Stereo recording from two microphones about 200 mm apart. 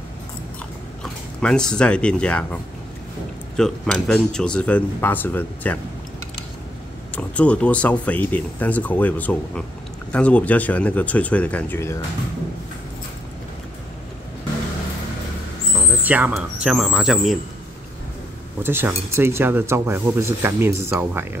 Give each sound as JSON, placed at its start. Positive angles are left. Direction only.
{"t": 1.4, "sound": "speech", "side_deg": 5}
{"t": 7.2, "sound": "speech", "side_deg": 5}
{"t": 16.0, "sound": "speech", "side_deg": -10}
{"t": 18.6, "sound": "speech", "side_deg": -10}